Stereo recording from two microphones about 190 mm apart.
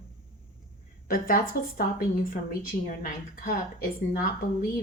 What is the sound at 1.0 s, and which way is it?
A woman's voice, 50° left (ahead or behind).